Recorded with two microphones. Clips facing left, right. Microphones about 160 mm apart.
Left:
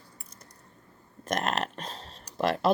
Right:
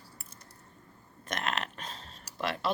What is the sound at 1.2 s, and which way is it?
Speech, 40° left (ahead or behind).